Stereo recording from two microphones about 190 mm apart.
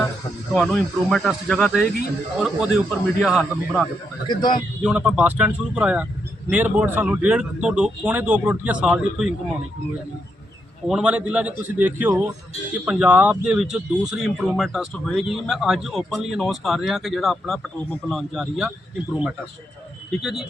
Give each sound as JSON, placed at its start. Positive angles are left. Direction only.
{"t": 0.5, "sound": "speech", "side_deg": 0}
{"t": 4.3, "sound": "speech", "side_deg": 25}
{"t": 4.8, "sound": "speech", "side_deg": -5}
{"t": 10.8, "sound": "speech", "side_deg": -5}
{"t": 20.2, "sound": "speech", "side_deg": 0}